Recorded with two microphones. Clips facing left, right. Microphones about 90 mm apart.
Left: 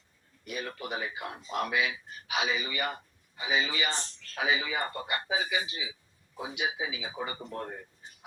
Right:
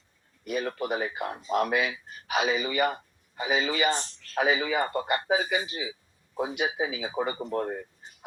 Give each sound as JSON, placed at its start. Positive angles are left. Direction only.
{"t": 0.4, "sound": "a man's voice", "side_deg": -45}